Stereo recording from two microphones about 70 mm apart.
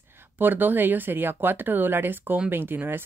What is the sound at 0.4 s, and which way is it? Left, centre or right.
Speech, right.